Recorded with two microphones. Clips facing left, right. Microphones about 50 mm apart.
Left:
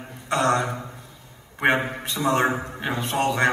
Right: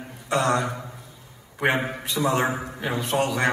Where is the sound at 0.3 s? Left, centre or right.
Left.